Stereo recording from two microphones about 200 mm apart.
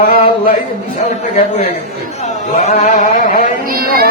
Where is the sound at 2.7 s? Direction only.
35° left (ahead or behind).